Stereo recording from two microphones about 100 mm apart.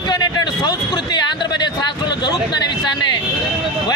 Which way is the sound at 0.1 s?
45° left (ahead or behind).